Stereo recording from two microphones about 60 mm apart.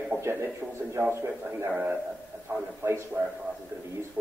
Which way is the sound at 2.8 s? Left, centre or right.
Right.